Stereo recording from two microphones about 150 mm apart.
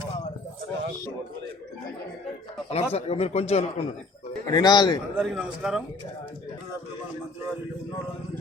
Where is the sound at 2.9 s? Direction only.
45° left (ahead or behind).